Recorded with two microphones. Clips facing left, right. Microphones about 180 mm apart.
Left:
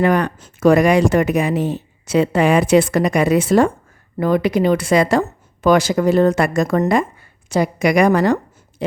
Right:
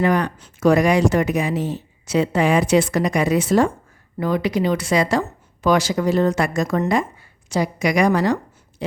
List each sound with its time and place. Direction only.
0.0 s speech: 55° left (ahead or behind)